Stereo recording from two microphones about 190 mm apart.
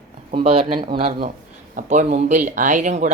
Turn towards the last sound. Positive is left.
turn(degrees=-40)  # may be behind; listen again after turning